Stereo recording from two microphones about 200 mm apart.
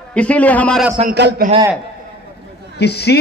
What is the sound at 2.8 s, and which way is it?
Speech, 55° left (ahead or behind).